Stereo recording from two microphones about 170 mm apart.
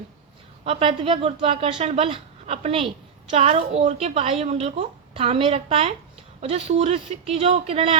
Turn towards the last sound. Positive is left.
turn(degrees=-35)  # may be behind; listen again after turning